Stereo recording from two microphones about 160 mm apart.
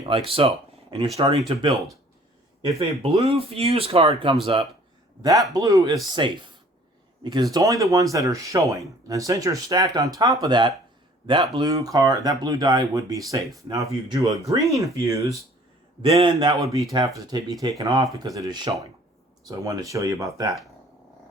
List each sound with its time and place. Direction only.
0.0 s speech: 35° right (ahead or behind)
2.7 s speech: 40° right (ahead or behind)
5.2 s speech: 20° right (ahead or behind)
16.0 s speech: 35° right (ahead or behind)